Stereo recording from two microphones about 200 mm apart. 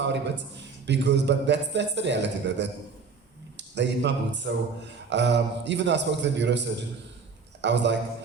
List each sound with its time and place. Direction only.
0.0 s a man's voice: 60° right (ahead or behind)